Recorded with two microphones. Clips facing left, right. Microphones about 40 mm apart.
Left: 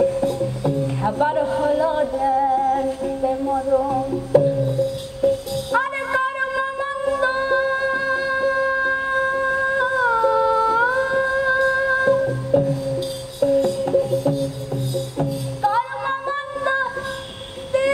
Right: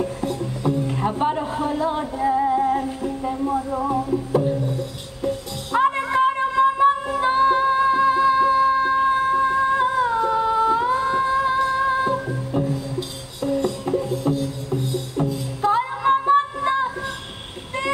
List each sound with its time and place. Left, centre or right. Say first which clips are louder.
0.0 s music: left 6 dB; centre
1.3 s music: left 5 dB; centre
5.8 s music: right 4 dB; centre
11.6 s humming: left 2 dB; centre
12.5 s music: left 6 dB; centre